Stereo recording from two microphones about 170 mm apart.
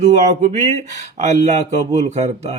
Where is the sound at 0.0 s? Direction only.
40° right (ahead or behind).